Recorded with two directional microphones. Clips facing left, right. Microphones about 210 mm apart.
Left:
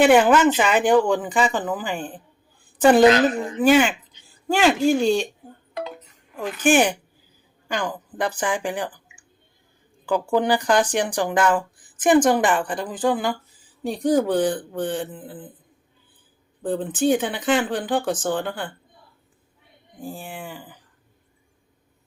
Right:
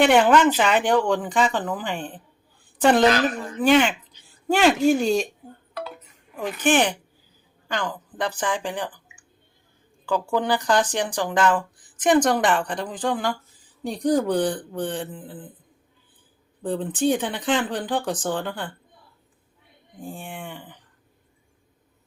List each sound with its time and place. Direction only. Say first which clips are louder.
0.0 s speech: left 2 dB; 5° left (ahead or behind)
3.1 s speech: left 4 dB; 25° left (ahead or behind)
3.6 s speech: left 1 dB; 5° left (ahead or behind)
6.3 s speech: left 2 dB; 10° left (ahead or behind)
10.1 s speech: left 3 dB; 15° left (ahead or behind)
16.6 s speech: left 2 dB; centre (ahead or behind)
20.0 s speech: left 1 dB; 5° left (ahead or behind)